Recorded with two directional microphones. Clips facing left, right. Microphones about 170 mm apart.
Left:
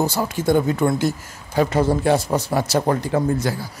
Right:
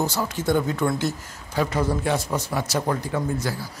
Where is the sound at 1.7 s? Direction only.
30° left (ahead or behind).